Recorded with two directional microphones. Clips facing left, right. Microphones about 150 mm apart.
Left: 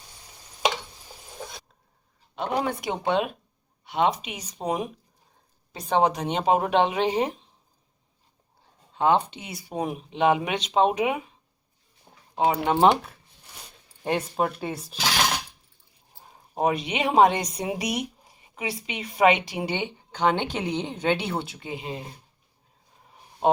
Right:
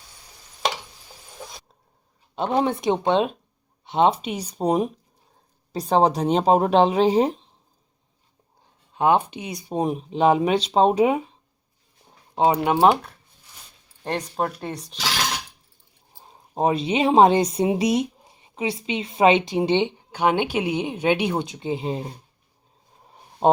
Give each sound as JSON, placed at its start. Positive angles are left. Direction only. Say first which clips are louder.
{"t": 2.3, "sound": "speech", "louder": "right 5 dB", "side_deg": -30}
{"t": 9.0, "sound": "speech", "louder": "right 2 dB", "side_deg": -10}
{"t": 9.9, "sound": "speech", "louder": "right 3 dB", "side_deg": -35}
{"t": 12.3, "sound": "speech", "louder": "right 4 dB", "side_deg": -25}
{"t": 12.6, "sound": "speech", "louder": "right 2 dB", "side_deg": -5}
{"t": 16.3, "sound": "speech", "louder": "right 3 dB", "side_deg": -30}
{"t": 20.1, "sound": "speech", "louder": "right 3 dB", "side_deg": -10}